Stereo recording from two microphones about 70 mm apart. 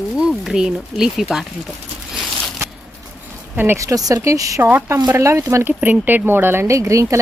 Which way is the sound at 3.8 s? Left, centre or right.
Right.